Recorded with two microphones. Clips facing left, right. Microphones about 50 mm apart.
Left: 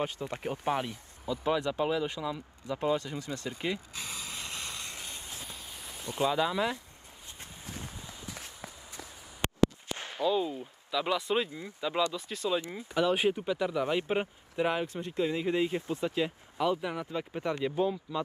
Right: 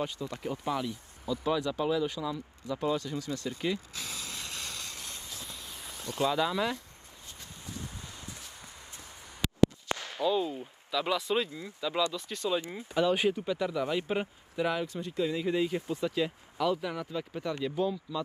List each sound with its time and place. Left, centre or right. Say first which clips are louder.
0.0 s speech: left 1 dB; left
1.2 s speech: even; left
2.2 s vehicle: even; left
6.0 s speech: even; centre
9.9 s a sound: right 4 dB; right
10.2 s speech: even; centre
11.4 s speech: even; left
12.1 s speech: even; centre
12.8 s speech: even; centre
13.8 s speech: left 1 dB; left